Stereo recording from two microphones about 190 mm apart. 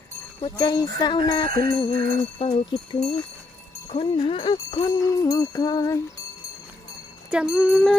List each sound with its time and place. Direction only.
0.4 s jingle bell: 20° left (ahead or behind)
7.3 s speech: 5° right (ahead or behind)